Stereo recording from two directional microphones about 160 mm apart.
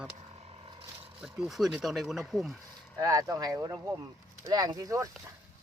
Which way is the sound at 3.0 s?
20° right (ahead or behind).